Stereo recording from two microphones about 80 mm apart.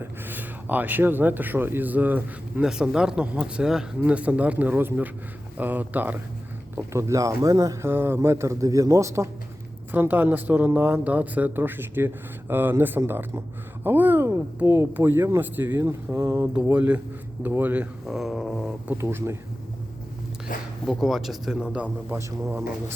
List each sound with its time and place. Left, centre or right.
0.0 s speech: right
2.6 s speech: centre
6.7 s speech: right
7.8 s a man's voice: right
9.9 s a man's voice: right
16.7 s speech: centre
18.0 s speech: centre
18.9 s a man's voice: right
20.8 s speech: centre
22.1 s a man's voice: right